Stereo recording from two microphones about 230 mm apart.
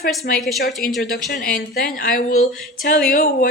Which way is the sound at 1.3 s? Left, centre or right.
Left.